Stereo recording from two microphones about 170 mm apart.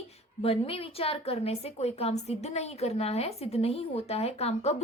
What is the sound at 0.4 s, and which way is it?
A woman's voice, 35° left (ahead or behind).